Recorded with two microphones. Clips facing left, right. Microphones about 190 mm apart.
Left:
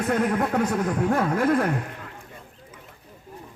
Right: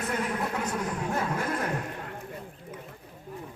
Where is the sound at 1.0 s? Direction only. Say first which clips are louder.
Left 10 dB; 60° left (ahead or behind).